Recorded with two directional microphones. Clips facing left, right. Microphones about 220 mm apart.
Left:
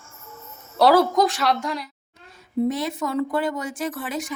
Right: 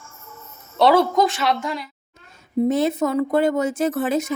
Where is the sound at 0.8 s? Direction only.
Centre (ahead or behind).